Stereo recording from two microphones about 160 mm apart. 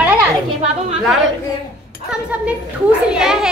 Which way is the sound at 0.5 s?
45° right (ahead or behind).